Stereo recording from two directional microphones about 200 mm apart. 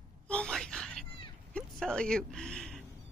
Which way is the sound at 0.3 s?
5° left (ahead or behind).